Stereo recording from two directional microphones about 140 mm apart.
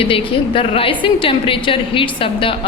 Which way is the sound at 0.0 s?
40° left (ahead or behind).